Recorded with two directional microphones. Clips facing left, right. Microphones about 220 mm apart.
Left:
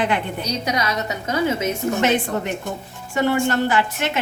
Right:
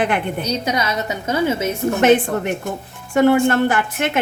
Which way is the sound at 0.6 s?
25° right (ahead or behind).